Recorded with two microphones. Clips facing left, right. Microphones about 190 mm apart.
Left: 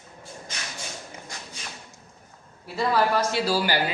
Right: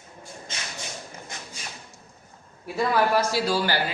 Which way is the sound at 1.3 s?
20° right (ahead or behind).